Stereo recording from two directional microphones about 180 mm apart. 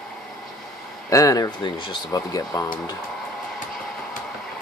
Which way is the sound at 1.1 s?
20° left (ahead or behind).